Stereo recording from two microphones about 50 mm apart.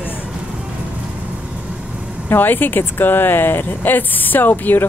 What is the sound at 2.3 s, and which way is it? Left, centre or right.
Speech, left.